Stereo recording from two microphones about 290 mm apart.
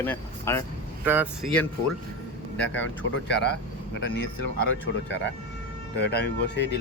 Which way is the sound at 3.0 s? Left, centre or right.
Left.